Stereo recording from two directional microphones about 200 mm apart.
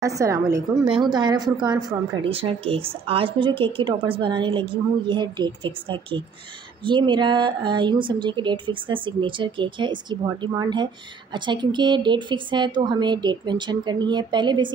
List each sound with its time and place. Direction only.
0.0 s a woman's voice: 15° right (ahead or behind)